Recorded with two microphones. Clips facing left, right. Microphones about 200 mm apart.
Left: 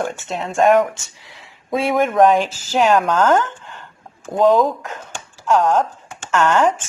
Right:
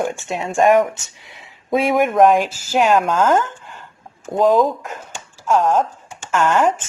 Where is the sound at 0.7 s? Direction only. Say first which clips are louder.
Even; 20° right (ahead or behind).